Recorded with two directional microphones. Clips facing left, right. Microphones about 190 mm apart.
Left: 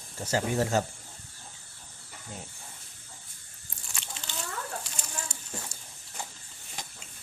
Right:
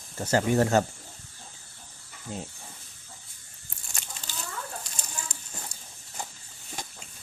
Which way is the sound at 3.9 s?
40° right (ahead or behind).